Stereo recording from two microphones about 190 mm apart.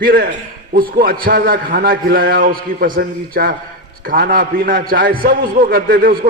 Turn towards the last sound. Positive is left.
turn(degrees=-50)  # may be behind; listen again after turning